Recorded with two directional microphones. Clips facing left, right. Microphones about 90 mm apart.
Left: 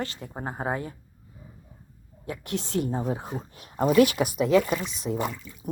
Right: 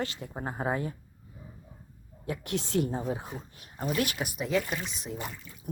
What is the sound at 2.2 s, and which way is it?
Speech, 35° left (ahead or behind).